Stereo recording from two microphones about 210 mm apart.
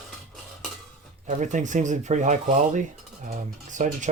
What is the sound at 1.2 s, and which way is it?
Speech, 35° right (ahead or behind).